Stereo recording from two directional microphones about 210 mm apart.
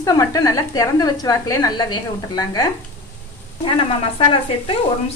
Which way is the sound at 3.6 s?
25° left (ahead or behind).